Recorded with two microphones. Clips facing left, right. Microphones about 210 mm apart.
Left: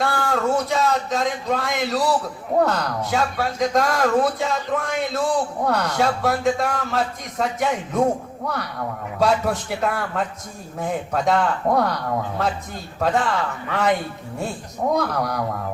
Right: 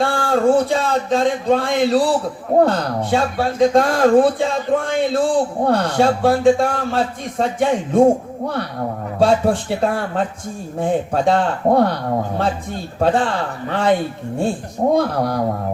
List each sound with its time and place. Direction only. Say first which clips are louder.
0.0 s speech: right 6 dB; 30° right (ahead or behind)